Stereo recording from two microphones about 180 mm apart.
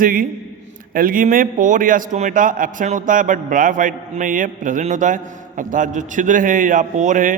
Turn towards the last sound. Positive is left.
turn(degrees=-45)  # may be behind; listen again after turning